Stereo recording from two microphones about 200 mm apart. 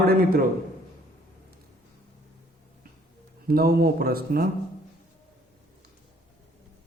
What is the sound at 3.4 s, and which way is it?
Speech, 50° right (ahead or behind).